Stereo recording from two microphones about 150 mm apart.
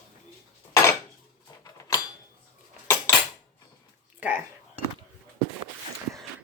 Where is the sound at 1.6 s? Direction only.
20° left (ahead or behind).